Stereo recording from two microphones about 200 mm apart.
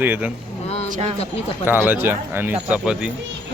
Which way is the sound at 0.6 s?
30° left (ahead or behind).